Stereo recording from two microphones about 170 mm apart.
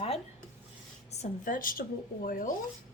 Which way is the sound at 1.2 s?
55° left (ahead or behind).